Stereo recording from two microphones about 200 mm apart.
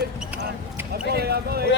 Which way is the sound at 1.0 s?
55° right (ahead or behind).